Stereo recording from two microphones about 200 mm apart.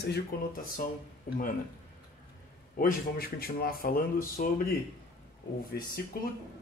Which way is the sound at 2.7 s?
45° left (ahead or behind).